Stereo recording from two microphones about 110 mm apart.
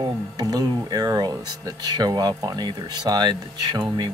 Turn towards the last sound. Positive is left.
turn(degrees=-45)  # may be behind; listen again after turning